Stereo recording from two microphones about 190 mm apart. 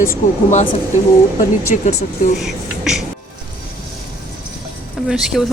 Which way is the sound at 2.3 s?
Centre (ahead or behind).